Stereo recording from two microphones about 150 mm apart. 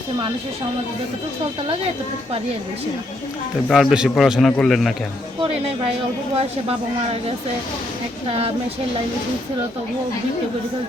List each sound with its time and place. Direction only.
3.7 s a man's voice: centre (ahead or behind)
5.4 s speech: 40° right (ahead or behind)